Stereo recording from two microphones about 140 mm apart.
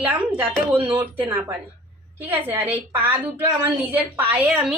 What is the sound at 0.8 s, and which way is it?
Speech, 35° right (ahead or behind).